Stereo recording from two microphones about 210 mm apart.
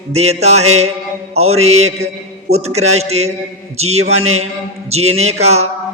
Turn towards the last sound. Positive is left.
turn(degrees=-30)  # may be behind; listen again after turning